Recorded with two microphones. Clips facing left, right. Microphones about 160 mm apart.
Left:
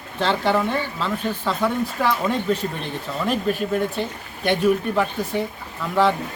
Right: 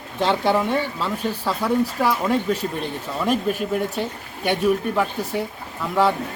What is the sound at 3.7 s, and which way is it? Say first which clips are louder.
Speech: left 1 dB; 10° right (ahead or behind).